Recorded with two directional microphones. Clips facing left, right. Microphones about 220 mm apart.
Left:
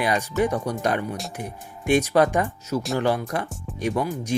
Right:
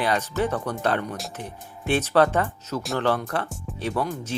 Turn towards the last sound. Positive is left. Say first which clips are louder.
# left 2 dB
turn(degrees=15)  # may be behind; listen again after turning